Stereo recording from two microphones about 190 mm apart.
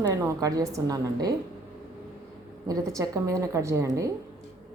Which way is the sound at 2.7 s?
15° right (ahead or behind).